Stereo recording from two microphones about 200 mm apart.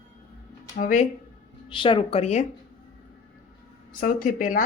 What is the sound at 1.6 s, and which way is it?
Speech, 25° left (ahead or behind).